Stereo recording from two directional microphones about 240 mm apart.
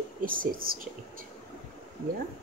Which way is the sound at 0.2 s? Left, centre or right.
Right.